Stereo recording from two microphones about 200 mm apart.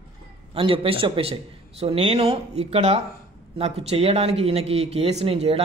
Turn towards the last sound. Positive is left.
turn(degrees=-30)  # may be behind; listen again after turning